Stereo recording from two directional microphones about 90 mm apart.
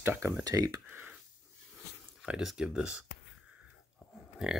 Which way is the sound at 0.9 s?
20° right (ahead or behind).